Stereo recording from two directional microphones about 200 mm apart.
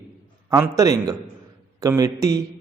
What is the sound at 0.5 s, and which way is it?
A man's voice, 15° right (ahead or behind).